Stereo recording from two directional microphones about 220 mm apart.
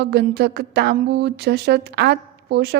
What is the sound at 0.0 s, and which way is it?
A woman's voice, 50° right (ahead or behind).